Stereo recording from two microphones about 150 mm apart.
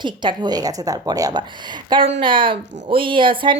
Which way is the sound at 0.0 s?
30° right (ahead or behind).